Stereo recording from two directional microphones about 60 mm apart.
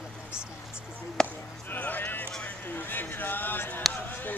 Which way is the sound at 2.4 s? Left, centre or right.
Left.